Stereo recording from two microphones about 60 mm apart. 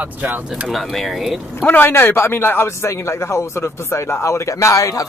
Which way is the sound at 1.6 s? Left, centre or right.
Left.